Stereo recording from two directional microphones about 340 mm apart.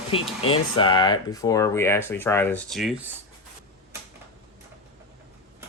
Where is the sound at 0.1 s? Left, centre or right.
Centre.